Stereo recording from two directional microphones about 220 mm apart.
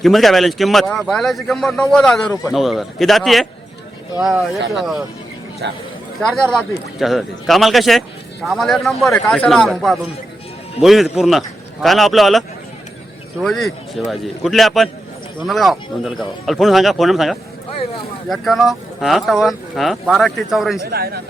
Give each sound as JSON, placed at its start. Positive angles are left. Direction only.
{"t": 0.0, "sound": "speech", "side_deg": 0}
{"t": 5.6, "sound": "a man's voice", "side_deg": -50}
{"t": 6.1, "sound": "speech", "side_deg": 5}
{"t": 20.8, "sound": "a man's voice", "side_deg": -45}